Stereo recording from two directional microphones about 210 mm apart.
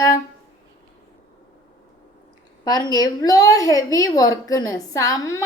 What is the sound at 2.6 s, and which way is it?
A woman's voice, 20° left (ahead or behind).